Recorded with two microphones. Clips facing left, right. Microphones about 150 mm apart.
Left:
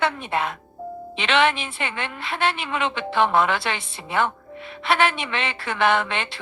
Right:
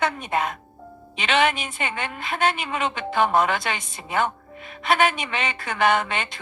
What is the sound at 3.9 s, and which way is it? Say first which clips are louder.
A woman's voice: even; 45° right (ahead or behind).